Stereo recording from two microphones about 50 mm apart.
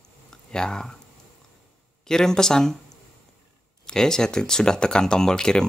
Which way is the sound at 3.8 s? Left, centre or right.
Centre.